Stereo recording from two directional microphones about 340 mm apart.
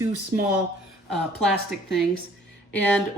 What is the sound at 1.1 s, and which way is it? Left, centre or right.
A woman's voice, centre.